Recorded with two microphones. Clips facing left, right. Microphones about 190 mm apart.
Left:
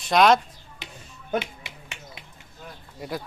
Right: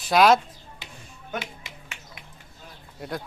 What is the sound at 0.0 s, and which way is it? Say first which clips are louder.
Speech: even; 5° right (ahead or behind).